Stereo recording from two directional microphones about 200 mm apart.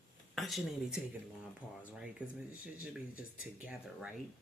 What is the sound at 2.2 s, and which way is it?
Speech, 5° right (ahead or behind).